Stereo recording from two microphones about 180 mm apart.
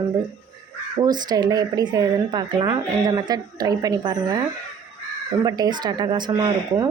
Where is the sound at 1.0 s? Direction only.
25° right (ahead or behind).